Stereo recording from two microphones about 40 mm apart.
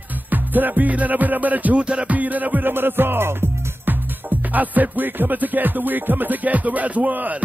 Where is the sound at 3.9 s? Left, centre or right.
Right.